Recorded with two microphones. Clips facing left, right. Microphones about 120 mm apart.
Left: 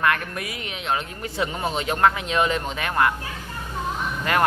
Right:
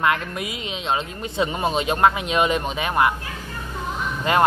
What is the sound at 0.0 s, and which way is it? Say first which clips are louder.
Speech: right 1 dB; 20° right (ahead or behind).